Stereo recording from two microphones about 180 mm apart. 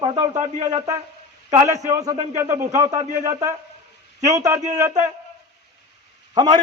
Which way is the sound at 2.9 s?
40° right (ahead or behind).